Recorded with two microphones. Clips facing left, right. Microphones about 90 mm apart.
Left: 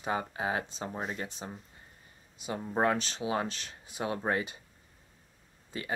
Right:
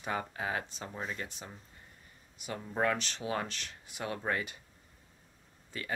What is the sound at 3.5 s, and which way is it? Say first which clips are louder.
Speech: left 3 dB; 25° left (ahead or behind).